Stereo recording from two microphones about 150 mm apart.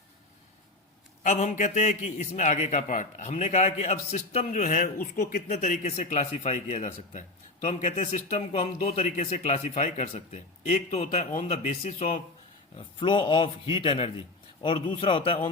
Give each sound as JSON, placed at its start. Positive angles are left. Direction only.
{"t": 1.2, "sound": "a man's voice", "side_deg": 55}
{"t": 5.5, "sound": "a man's voice", "side_deg": 55}